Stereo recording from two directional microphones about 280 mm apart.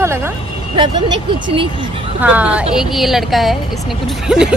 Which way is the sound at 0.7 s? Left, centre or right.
Centre.